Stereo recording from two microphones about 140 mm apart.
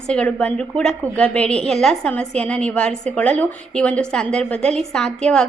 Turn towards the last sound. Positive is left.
turn(degrees=5)  # may be behind; listen again after turning